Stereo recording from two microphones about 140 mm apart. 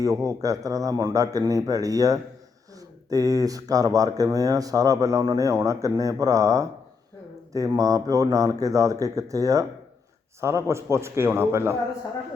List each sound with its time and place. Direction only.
0.0 s speech: 25° right (ahead or behind)